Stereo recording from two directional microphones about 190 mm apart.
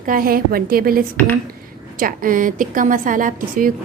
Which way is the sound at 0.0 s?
50° right (ahead or behind).